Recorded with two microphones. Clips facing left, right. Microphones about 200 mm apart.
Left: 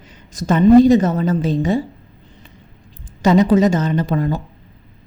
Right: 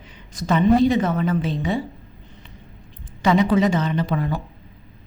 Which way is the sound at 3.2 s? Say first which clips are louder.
Left 5 dB; 40° left (ahead or behind).